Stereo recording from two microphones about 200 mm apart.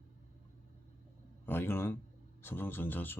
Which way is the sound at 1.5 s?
10° left (ahead or behind).